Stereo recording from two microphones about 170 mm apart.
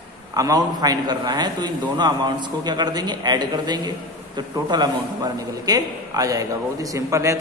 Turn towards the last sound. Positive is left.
turn(degrees=-15)  # may be behind; listen again after turning